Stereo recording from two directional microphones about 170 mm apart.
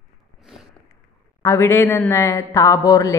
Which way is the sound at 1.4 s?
15° left (ahead or behind).